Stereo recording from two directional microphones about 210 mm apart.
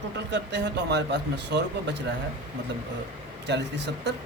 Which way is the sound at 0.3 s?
55° right (ahead or behind).